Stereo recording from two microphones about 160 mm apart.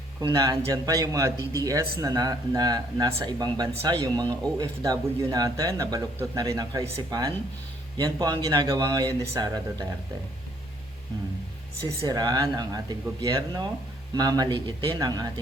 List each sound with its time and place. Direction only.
0.2 s speech: 25° right (ahead or behind)
11.9 s speech: 25° right (ahead or behind)